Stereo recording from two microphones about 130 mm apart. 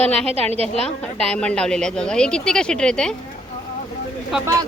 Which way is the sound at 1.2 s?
10° left (ahead or behind).